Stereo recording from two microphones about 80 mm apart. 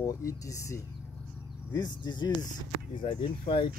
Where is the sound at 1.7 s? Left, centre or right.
Left.